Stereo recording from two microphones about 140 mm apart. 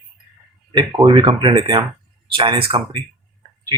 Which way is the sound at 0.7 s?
35° right (ahead or behind).